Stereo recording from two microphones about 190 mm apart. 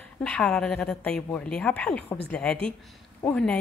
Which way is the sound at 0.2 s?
5° left (ahead or behind).